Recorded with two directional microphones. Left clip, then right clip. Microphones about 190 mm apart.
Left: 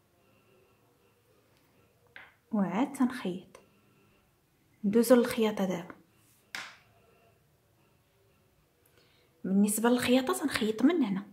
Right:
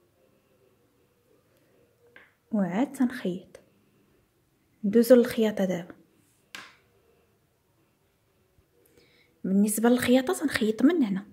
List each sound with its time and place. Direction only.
2.5 s a woman's voice: 20° right (ahead or behind)
4.9 s a woman's voice: 15° right (ahead or behind)
8.9 s a woman's voice: 25° right (ahead or behind)